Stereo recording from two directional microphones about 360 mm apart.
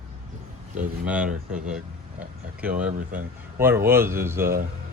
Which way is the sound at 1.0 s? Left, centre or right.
Centre.